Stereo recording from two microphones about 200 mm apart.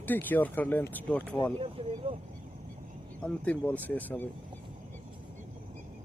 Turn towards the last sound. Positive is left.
turn(degrees=10)  # may be behind; listen again after turning